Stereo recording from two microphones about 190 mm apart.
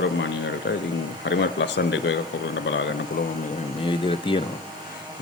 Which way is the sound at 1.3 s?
65° left (ahead or behind).